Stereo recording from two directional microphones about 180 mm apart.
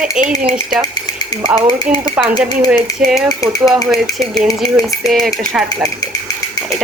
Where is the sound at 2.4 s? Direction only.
10° right (ahead or behind).